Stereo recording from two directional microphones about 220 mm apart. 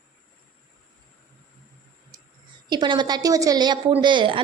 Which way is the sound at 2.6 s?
20° right (ahead or behind).